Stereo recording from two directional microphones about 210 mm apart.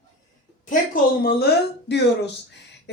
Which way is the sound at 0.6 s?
40° left (ahead or behind).